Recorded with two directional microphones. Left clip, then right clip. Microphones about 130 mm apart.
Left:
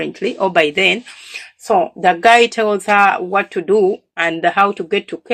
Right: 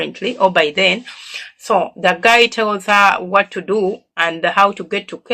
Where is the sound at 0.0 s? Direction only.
50° left (ahead or behind).